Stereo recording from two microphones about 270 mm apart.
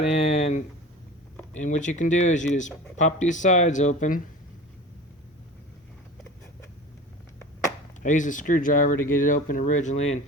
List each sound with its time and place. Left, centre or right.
0.0 s a sound: left
1.5 s speech: left
8.0 s speech: left